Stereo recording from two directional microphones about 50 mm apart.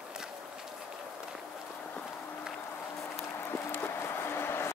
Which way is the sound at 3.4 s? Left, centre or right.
Left.